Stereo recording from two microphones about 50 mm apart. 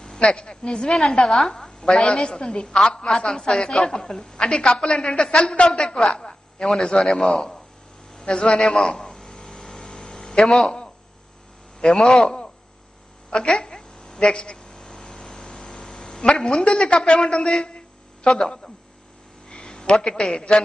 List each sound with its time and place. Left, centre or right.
0.0 s a woman's voice: centre
8.2 s a sound: centre
11.8 s a woman's voice: centre
13.3 s a sound: centre
17.6 s music: centre
19.5 s a man's voice: centre